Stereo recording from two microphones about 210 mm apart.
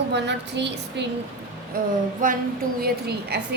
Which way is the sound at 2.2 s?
40° right (ahead or behind).